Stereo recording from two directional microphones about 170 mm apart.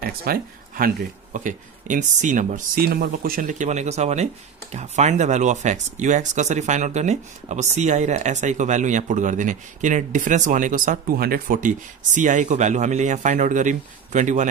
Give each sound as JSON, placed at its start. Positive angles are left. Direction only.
{"t": 0.0, "sound": "speech", "side_deg": -60}